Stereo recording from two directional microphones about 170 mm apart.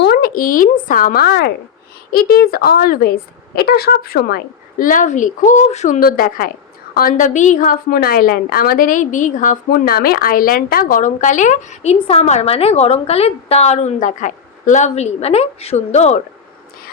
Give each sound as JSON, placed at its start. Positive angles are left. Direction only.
{"t": 0.0, "sound": "speech", "side_deg": 70}
{"t": 2.1, "sound": "a woman's voice", "side_deg": 60}
{"t": 6.0, "sound": "a woman's voice", "side_deg": 60}